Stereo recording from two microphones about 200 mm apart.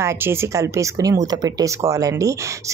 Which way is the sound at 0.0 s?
10° right (ahead or behind).